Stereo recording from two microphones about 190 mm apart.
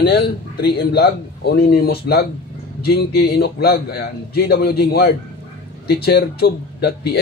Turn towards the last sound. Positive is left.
turn(degrees=60)  # may be behind; listen again after turning